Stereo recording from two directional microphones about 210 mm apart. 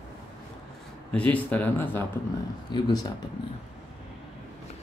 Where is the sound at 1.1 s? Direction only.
5° left (ahead or behind).